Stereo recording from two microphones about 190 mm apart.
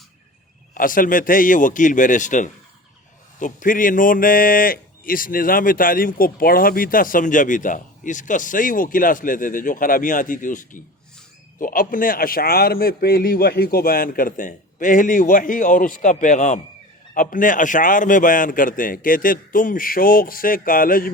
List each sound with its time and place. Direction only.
0.7 s speech: 45° left (ahead or behind)